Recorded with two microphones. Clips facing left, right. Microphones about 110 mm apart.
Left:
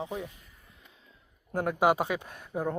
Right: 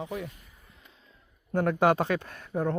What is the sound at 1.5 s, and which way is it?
Speech, 10° left (ahead or behind).